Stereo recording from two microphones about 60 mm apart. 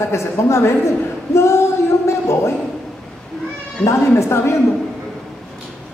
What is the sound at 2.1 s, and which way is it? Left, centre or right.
Speech, left.